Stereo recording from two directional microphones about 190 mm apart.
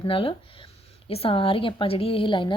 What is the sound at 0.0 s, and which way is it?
A woman's voice, 30° left (ahead or behind).